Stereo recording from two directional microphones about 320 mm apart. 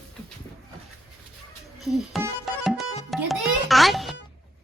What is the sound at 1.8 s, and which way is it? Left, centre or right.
Tabla, centre.